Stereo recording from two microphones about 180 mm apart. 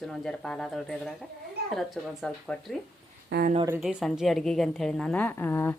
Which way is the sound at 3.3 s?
85° right.